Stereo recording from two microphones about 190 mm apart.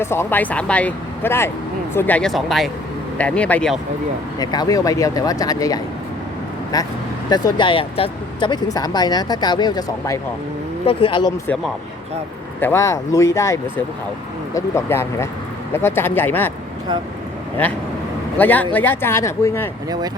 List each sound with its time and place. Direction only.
0.0 s speech: 10° left (ahead or behind)
4.4 s speech: 20° left (ahead or behind)
12.5 s speech: 10° left (ahead or behind)
18.3 s speech: 10° left (ahead or behind)